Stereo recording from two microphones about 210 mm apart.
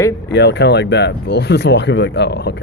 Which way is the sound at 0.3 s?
55° left (ahead or behind).